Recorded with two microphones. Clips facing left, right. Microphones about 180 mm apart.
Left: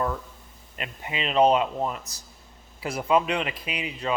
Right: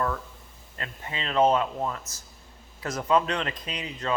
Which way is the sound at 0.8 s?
15° left (ahead or behind).